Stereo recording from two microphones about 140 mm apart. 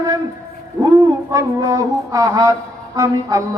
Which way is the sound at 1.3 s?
25° right (ahead or behind).